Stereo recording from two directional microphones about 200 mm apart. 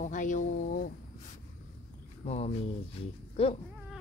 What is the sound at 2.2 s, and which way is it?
Speech, 35° left (ahead or behind).